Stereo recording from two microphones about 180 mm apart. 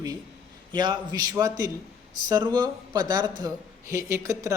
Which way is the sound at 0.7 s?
25° right (ahead or behind).